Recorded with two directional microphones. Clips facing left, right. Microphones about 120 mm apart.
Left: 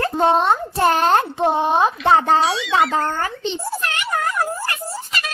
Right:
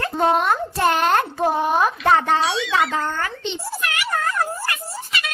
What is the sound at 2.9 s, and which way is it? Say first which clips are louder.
Speech: left 3 dB; 35° left (ahead or behind).